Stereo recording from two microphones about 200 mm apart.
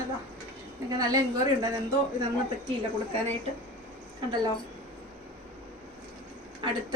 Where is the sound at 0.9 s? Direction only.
20° right (ahead or behind).